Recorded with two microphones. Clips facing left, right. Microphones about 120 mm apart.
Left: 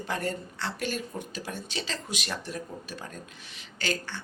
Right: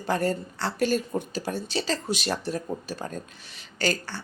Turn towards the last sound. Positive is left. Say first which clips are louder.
# right 5 dB
turn(degrees=-40)  # may be behind; listen again after turning